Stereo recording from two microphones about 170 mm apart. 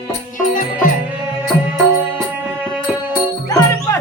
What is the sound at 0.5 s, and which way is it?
Music, 50° left (ahead or behind).